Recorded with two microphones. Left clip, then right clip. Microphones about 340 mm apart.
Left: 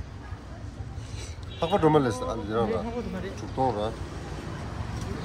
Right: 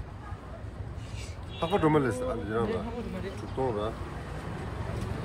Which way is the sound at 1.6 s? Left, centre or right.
Left.